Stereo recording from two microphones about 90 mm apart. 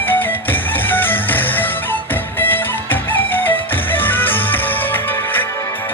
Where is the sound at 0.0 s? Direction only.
20° left (ahead or behind).